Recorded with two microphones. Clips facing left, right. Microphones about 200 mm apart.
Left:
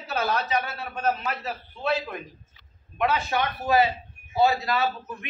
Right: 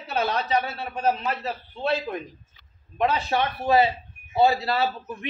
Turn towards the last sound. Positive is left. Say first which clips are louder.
# right 1 dB
turn(degrees=-30)  # may be behind; listen again after turning